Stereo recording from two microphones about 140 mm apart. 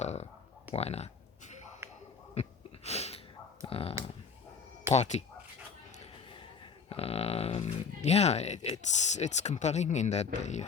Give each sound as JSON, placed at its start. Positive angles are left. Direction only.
{"t": 0.0, "sound": "clicking", "side_deg": 50}
{"t": 0.7, "sound": "speech", "side_deg": 50}
{"t": 2.3, "sound": "sneeze", "side_deg": 50}
{"t": 3.7, "sound": "speech", "side_deg": 45}
{"t": 4.9, "sound": "speech", "side_deg": 55}
{"t": 6.9, "sound": "speech", "side_deg": 45}